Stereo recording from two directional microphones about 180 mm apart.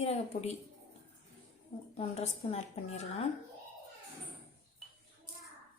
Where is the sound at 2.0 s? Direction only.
35° left (ahead or behind).